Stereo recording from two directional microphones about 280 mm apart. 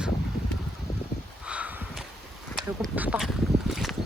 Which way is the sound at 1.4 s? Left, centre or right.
Centre.